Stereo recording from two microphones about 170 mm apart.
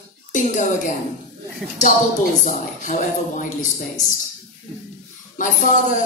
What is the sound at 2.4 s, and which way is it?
A woman's voice, 50° left (ahead or behind).